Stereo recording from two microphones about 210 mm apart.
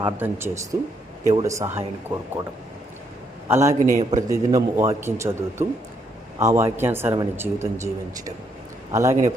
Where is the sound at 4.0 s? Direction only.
30° right (ahead or behind).